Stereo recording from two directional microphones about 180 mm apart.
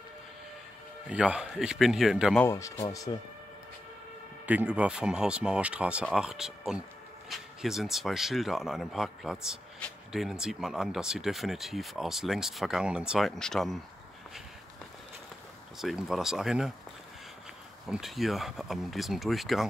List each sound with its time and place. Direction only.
1.0 s speech: 5° right (ahead or behind)
2.3 s speech: 15° left (ahead or behind)
4.5 s speech: 5° right (ahead or behind)
15.8 s speech: centre (ahead or behind)
17.8 s speech: centre (ahead or behind)